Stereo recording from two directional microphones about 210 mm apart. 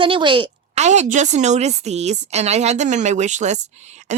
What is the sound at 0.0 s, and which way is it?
Speech, 25° right (ahead or behind).